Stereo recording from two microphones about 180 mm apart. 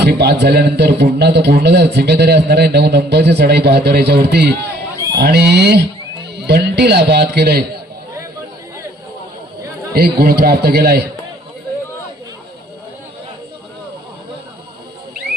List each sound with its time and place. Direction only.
0.0 s a man's voice: 65° right (ahead or behind)
9.9 s a man's voice: 55° right (ahead or behind)